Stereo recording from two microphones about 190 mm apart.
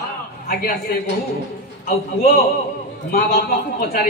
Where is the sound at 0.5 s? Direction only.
50° left (ahead or behind).